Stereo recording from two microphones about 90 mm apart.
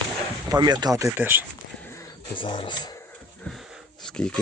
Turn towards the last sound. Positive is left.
turn(degrees=10)  # may be behind; listen again after turning